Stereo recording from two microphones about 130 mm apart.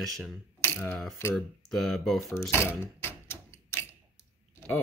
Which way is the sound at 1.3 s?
Centre (ahead or behind).